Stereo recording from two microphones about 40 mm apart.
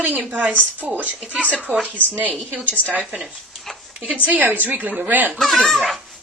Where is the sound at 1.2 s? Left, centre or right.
Left.